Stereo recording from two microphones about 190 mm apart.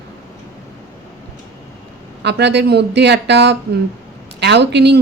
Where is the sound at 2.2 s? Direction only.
65° right (ahead or behind).